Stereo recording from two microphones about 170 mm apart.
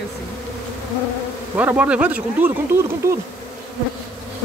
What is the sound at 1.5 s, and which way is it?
Speech, 10° right (ahead or behind).